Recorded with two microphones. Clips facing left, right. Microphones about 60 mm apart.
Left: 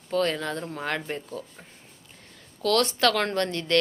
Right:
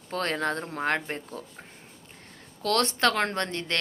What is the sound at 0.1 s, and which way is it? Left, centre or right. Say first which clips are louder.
Speech: left 2 dB; right.